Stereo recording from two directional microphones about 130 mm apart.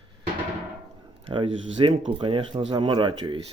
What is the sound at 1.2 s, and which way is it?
Speech, 40° right (ahead or behind).